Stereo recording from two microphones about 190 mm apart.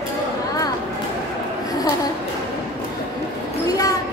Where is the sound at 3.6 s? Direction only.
20° left (ahead or behind).